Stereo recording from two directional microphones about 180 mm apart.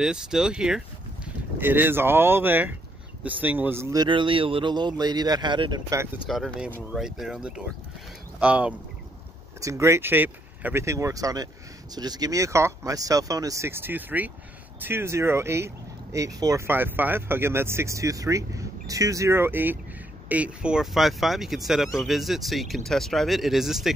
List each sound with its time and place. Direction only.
0.0 s a man's voice: 5° right (ahead or behind); by 6.0 s 20° right (ahead or behind)
6.2 s a man's voice: centre (ahead or behind)